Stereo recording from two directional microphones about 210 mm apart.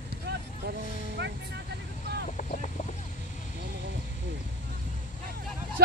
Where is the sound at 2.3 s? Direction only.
35° left (ahead or behind).